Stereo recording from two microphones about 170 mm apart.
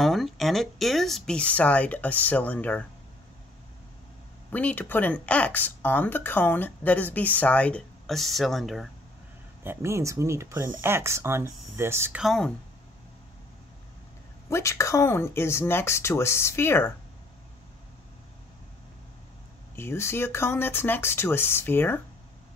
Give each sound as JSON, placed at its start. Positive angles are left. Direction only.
{"t": 0.0, "sound": "speech", "side_deg": 0}
{"t": 4.5, "sound": "speech", "side_deg": 10}
{"t": 9.6, "sound": "speech", "side_deg": -15}
{"t": 12.2, "sound": "speech", "side_deg": 0}
{"t": 14.5, "sound": "speech", "side_deg": 15}
{"t": 19.7, "sound": "speech", "side_deg": 15}